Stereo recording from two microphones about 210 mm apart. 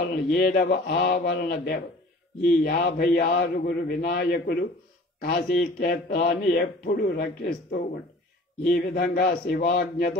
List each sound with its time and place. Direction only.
0.1 s a man's voice: 50° left (ahead or behind)